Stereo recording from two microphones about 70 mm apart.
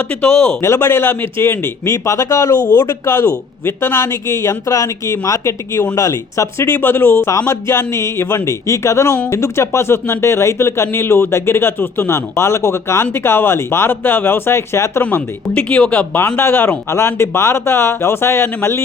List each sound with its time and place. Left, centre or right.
0.1 s speech: centre
0.6 s speech: left
7.3 s speech: left
15.5 s speech: centre
16.1 s speech: left